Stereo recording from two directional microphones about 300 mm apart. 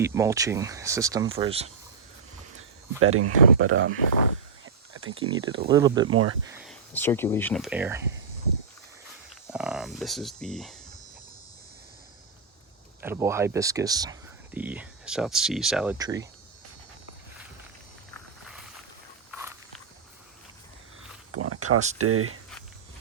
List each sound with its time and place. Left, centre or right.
0.0 s speech: centre
3.0 s speech: right
4.6 s a sound: right
5.2 s speech: centre
6.1 s speech: right
6.5 s a sound: centre
6.9 s speech: centre
9.5 s speech: centre
13.0 s speech: centre
16.0 s speech: centre
19.3 s walk: centre
21.3 s a sound: right
21.9 s speech: right